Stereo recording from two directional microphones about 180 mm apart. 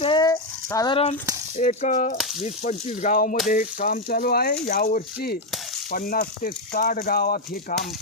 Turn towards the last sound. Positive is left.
turn(degrees=55)  # may be behind; listen again after turning